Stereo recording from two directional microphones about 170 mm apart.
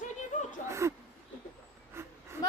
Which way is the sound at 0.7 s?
15° right (ahead or behind).